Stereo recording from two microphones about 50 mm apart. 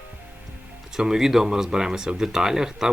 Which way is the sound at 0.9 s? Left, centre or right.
Centre.